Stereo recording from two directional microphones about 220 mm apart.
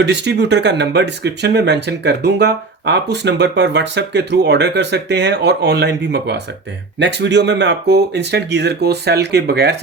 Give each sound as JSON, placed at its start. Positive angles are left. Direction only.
{"t": 0.0, "sound": "speech", "side_deg": -50}